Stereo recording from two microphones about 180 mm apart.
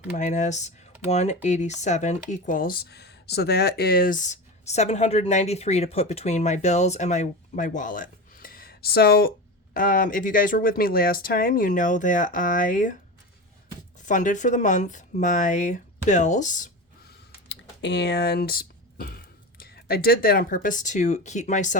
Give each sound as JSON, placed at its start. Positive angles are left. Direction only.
{"t": 0.1, "sound": "speech", "side_deg": 45}
{"t": 14.0, "sound": "speech", "side_deg": 45}
{"t": 17.5, "sound": "speech", "side_deg": 75}